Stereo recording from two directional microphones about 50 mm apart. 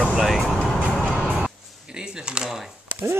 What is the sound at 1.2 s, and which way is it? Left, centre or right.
Music, right.